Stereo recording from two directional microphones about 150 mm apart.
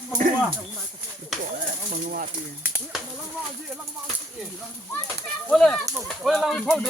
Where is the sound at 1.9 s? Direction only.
70° right (ahead or behind).